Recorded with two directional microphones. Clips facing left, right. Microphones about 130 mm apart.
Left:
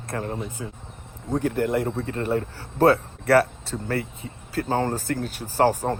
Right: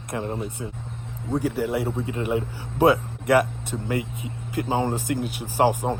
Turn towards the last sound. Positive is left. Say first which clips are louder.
# even
turn(degrees=-15)  # may be behind; listen again after turning